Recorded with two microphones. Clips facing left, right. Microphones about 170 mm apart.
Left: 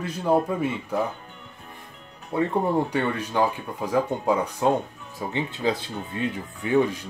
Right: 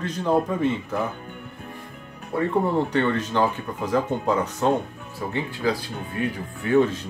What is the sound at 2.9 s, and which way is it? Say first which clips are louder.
Speech: right 3 dB; 10° left (ahead or behind).